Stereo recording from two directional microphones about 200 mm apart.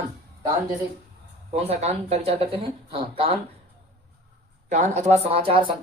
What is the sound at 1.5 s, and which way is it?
Speech, 30° right (ahead or behind).